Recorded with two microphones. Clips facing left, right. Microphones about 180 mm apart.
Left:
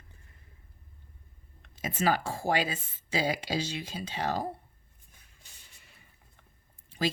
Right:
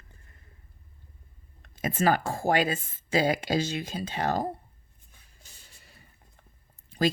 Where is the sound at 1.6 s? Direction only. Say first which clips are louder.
Right 3 dB; 50° right (ahead or behind).